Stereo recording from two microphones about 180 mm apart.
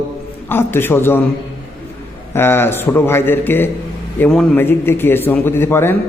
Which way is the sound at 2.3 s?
10° left (ahead or behind).